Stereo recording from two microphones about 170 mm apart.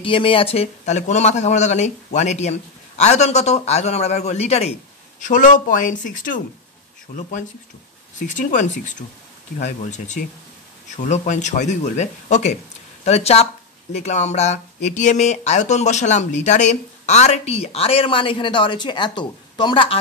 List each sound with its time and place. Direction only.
0.0 s speech: 30° left (ahead or behind)